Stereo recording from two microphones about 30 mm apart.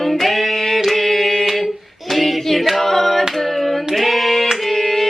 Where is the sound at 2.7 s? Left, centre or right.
Centre.